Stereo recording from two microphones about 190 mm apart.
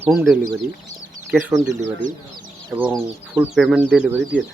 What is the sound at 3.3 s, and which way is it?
Speech, 5° right (ahead or behind).